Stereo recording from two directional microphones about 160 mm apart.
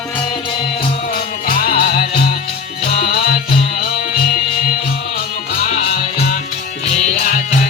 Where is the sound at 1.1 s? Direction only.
70° left (ahead or behind).